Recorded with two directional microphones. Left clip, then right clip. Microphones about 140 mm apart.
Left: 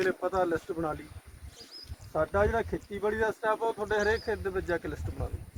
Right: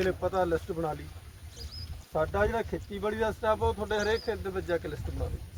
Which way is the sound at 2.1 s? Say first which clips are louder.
Left 1 dB; 10° left (ahead or behind).